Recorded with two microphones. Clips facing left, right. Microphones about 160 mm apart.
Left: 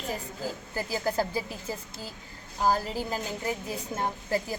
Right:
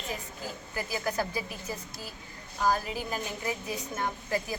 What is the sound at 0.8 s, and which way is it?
Speech, 30° left (ahead or behind).